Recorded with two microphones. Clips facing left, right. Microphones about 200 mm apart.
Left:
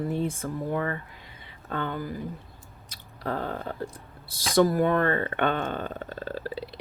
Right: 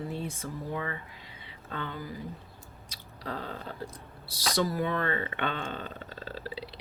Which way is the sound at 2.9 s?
50° left (ahead or behind).